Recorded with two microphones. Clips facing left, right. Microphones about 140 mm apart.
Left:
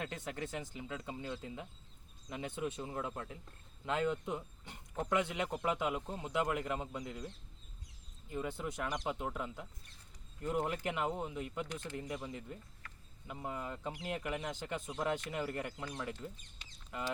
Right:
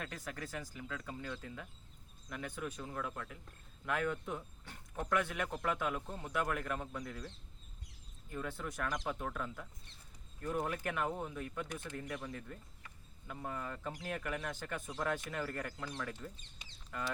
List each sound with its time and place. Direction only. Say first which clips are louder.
0.0 s speech: left 3 dB; 25° left (ahead or behind)